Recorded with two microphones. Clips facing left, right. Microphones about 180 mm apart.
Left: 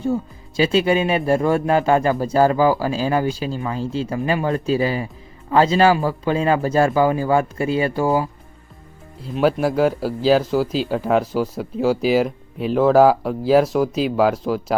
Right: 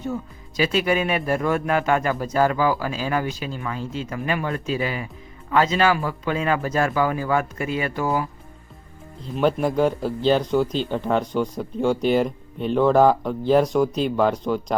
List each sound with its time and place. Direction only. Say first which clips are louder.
0.0 s speech: left 6 dB; 30° left (ahead or behind)
9.2 s speech: left 3 dB; 5° left (ahead or behind)